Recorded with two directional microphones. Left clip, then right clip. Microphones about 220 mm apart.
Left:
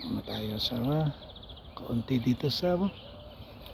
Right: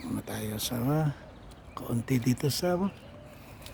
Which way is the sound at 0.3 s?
15° right (ahead or behind).